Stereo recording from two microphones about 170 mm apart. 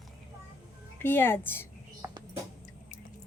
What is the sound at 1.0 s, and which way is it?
Speech, 10° left (ahead or behind).